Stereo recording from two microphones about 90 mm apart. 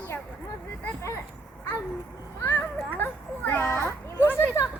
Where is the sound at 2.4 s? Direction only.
20° left (ahead or behind).